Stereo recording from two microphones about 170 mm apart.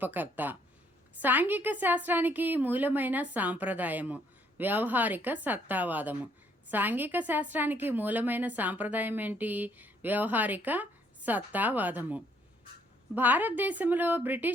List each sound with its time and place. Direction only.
0.0 s a woman's voice: 10° right (ahead or behind)